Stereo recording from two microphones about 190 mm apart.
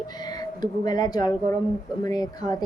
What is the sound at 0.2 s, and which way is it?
A woman's voice, 20° left (ahead or behind).